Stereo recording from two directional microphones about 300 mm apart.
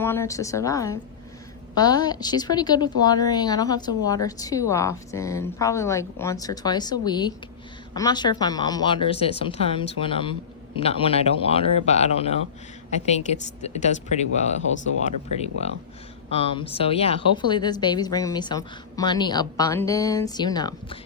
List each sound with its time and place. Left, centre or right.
0.0 s a woman's voice: centre